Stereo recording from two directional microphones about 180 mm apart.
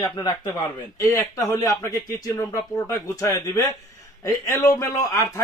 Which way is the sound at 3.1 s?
20° left (ahead or behind).